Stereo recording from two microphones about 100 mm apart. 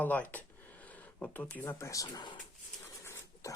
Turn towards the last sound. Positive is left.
turn(degrees=30)  # may be behind; listen again after turning